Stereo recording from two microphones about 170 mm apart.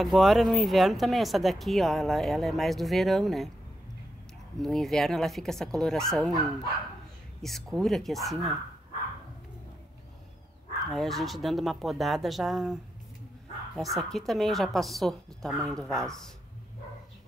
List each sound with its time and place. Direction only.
0.0 s speech: centre (ahead or behind)
4.6 s speech: centre (ahead or behind)
7.4 s speech: centre (ahead or behind)
10.9 s speech: centre (ahead or behind)
13.7 s speech: centre (ahead or behind)